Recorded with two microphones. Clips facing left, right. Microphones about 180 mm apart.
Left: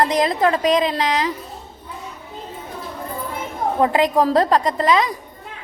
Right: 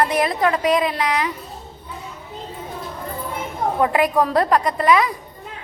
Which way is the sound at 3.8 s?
25° left (ahead or behind).